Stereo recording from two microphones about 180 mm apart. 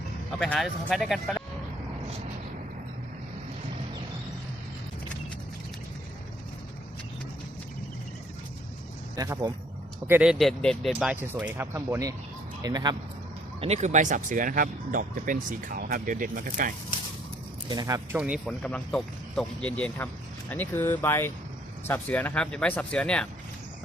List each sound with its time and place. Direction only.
0.3 s speech: 5° left (ahead or behind)
9.1 s speech: 20° right (ahead or behind)
10.1 s speech: 5° right (ahead or behind)
11.3 s speech: 10° right (ahead or behind)
13.6 s speech: 40° right (ahead or behind)
17.7 s speech: 20° right (ahead or behind)
18.2 s speech: 5° right (ahead or behind)
18.6 s speech: 5° left (ahead or behind)